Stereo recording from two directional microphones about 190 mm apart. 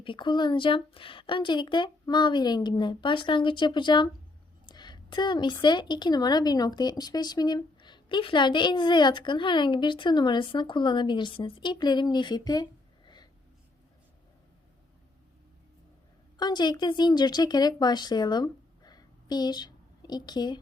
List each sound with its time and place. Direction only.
0.0 s a woman's voice: 25° left (ahead or behind)
16.4 s speech: 20° left (ahead or behind)